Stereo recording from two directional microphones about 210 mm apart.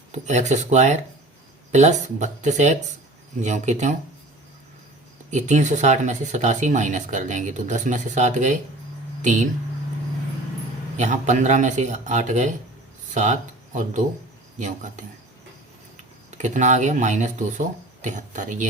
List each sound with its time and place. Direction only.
0.1 s speech: 35° right (ahead or behind)
5.3 s speech: 35° right (ahead or behind)
10.9 s speech: 35° right (ahead or behind)
16.4 s speech: 35° right (ahead or behind)